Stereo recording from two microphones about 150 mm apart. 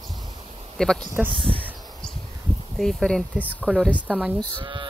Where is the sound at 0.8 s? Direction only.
5° left (ahead or behind).